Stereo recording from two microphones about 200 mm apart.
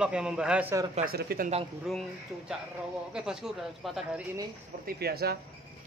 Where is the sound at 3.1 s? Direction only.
5° right (ahead or behind).